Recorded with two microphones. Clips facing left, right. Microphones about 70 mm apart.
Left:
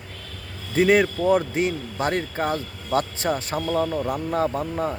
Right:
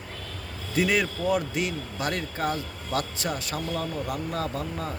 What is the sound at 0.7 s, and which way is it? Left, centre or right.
Speech, left.